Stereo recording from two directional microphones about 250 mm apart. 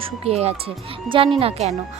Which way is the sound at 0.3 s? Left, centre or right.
Right.